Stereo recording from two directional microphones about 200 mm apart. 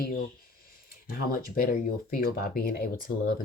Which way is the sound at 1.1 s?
45° left (ahead or behind).